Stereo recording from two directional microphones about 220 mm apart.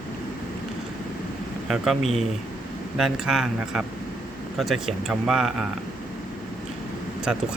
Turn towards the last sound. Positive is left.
turn(degrees=-5)  # may be behind; listen again after turning